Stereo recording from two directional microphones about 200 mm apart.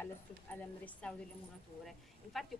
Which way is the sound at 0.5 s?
5° left (ahead or behind).